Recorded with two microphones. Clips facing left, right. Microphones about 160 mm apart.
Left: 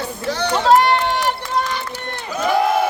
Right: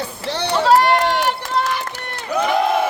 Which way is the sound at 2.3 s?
60° right (ahead or behind).